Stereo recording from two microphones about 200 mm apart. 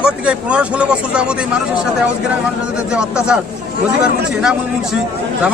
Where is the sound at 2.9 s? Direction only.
5° right (ahead or behind).